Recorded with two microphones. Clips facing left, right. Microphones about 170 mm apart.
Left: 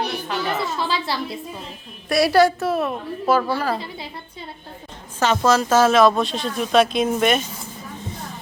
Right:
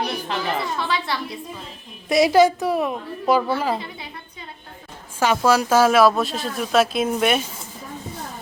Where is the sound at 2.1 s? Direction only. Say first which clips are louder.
Right 1 dB; 20° right (ahead or behind).